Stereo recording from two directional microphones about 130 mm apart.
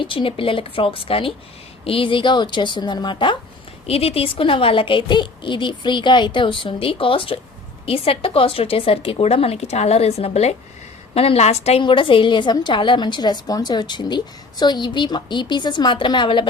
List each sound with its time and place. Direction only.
0.0 s a woman's voice: 40° left (ahead or behind)
11.8 s a woman's voice: 40° left (ahead or behind)